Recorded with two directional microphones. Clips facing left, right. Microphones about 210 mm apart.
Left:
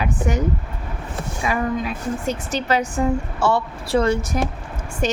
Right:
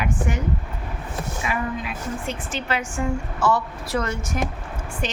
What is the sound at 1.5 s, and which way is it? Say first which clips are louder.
A woman's voice: left 6 dB; 40° left (ahead or behind).